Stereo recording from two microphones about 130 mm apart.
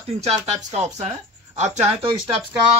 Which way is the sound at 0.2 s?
60° right (ahead or behind).